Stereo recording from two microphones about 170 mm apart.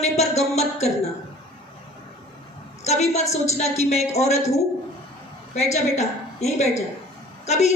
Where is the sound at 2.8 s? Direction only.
40° left (ahead or behind).